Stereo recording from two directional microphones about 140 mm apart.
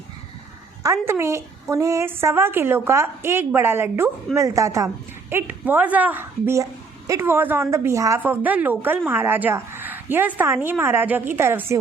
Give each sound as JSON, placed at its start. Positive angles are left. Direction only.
{"t": 1.0, "sound": "a woman's voice", "side_deg": -20}